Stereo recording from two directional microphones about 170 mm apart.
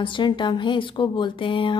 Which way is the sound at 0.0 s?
30° left (ahead or behind).